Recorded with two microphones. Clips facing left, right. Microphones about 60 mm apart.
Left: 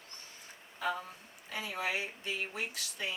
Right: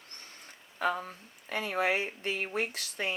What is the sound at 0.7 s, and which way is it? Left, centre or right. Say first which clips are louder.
Speech: right 5 dB; right.